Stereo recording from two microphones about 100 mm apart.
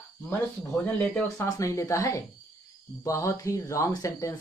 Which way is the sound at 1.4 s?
35° left (ahead or behind).